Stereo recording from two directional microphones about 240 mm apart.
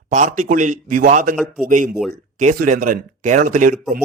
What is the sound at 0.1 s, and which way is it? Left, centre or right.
Speech, right.